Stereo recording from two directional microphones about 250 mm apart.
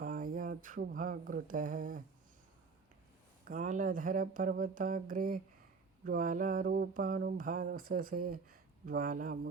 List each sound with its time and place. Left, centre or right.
0.0 s mantra: right
3.4 s mantra: right